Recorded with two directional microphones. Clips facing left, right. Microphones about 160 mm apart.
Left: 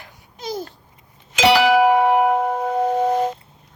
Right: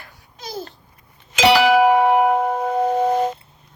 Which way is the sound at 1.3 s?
65° right (ahead or behind).